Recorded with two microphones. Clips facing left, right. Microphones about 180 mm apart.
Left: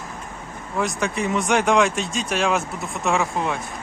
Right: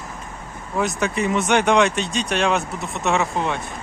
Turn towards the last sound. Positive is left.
turn(degrees=0)  # may be behind; listen again after turning